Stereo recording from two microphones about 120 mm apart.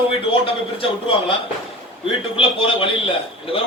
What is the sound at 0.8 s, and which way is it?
Speech, 50° left (ahead or behind).